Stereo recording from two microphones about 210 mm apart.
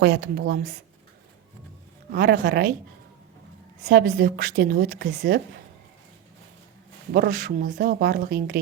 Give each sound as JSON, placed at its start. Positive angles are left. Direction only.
{"t": 0.0, "sound": "a woman's voice", "side_deg": -55}
{"t": 2.1, "sound": "a woman's voice", "side_deg": -45}
{"t": 3.8, "sound": "a woman's voice", "side_deg": -40}
{"t": 7.1, "sound": "a woman's voice", "side_deg": -45}